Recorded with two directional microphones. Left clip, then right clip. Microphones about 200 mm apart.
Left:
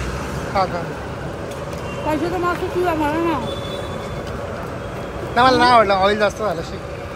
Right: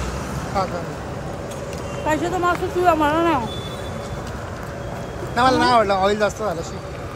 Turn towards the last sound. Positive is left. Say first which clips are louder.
# left 2 dB
turn(degrees=-15)  # may be behind; listen again after turning